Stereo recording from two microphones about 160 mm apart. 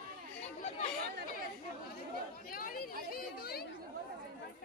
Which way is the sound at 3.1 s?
70° left (ahead or behind).